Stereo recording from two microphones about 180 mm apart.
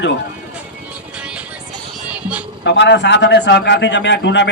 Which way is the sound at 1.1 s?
5° right (ahead or behind).